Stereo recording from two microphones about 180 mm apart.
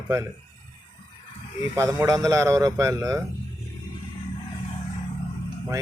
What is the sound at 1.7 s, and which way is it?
Speech, 20° right (ahead or behind).